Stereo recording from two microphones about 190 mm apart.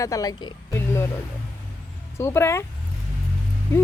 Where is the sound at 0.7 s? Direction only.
15° left (ahead or behind).